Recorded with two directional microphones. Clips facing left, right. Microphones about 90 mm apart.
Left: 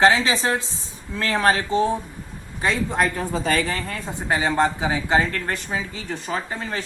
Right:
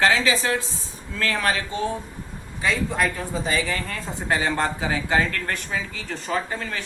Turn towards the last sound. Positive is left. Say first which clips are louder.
# even
turn(degrees=25)  # may be behind; listen again after turning